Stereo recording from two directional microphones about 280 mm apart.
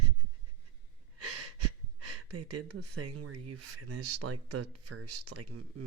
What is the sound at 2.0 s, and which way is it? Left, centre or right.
Speech, right.